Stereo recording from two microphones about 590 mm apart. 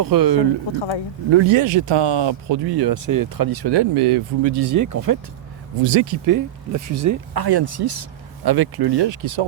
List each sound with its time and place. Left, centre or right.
0.0 s speech: right
0.7 s speech: left
1.3 s speech: right
4.5 s speech: right
5.8 s speech: right